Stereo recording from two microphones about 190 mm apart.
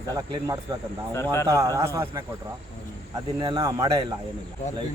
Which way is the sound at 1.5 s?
15° right (ahead or behind).